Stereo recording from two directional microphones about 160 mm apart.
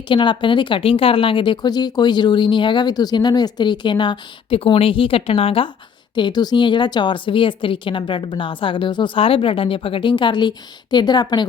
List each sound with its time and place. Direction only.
0.1 s a woman's voice: 30° left (ahead or behind)